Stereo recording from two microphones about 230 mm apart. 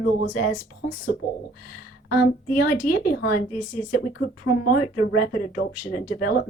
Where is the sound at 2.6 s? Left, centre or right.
Left.